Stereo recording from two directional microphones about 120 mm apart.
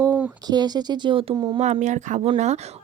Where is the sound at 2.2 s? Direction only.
70° right (ahead or behind).